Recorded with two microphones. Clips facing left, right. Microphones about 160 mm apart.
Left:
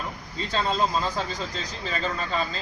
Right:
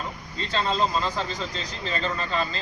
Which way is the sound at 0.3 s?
5° left (ahead or behind).